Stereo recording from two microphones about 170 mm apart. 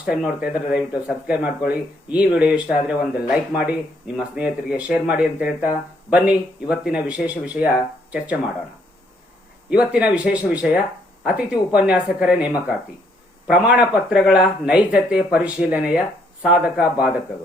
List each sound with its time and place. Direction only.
0.0 s speech: 5° right (ahead or behind)
9.6 s speech: 5° right (ahead or behind)